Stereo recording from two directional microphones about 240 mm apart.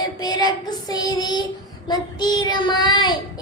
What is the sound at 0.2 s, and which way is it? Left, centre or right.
Child singing, centre.